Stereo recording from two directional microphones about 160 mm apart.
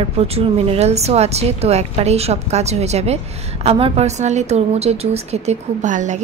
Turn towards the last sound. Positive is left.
turn(degrees=-50)  # may be behind; listen again after turning